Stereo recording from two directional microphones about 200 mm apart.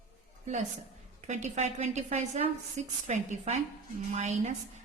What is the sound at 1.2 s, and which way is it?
A woman's voice, 35° right (ahead or behind).